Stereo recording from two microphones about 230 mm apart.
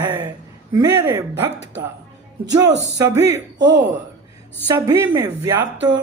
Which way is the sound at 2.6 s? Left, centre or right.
Centre.